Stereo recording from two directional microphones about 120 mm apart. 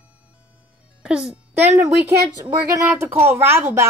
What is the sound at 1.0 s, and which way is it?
Speech, 5° right (ahead or behind).